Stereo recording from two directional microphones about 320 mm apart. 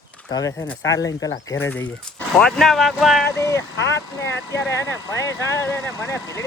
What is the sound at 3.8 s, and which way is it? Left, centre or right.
Speech, left.